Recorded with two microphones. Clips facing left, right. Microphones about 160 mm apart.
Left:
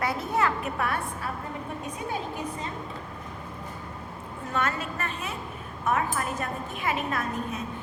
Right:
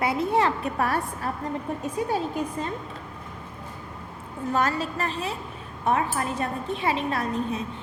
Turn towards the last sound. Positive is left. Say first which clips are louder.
# right 4 dB
turn(degrees=-30)  # may be behind; listen again after turning